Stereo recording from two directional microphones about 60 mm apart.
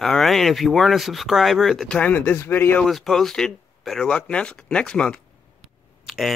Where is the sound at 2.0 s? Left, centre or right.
Left.